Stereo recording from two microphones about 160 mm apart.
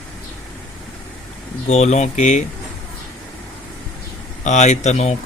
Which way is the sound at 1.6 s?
45° left (ahead or behind).